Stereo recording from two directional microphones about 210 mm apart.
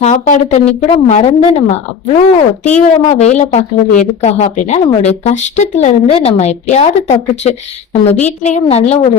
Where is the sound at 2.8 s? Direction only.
30° left (ahead or behind).